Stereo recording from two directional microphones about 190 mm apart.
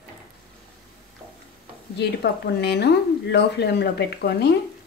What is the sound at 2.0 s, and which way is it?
Speech, 60° left (ahead or behind).